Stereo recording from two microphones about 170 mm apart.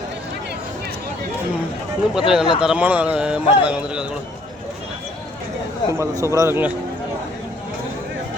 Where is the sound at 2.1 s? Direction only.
5° right (ahead or behind).